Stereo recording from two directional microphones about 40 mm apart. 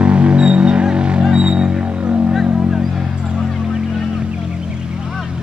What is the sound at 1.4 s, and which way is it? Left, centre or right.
Music, right.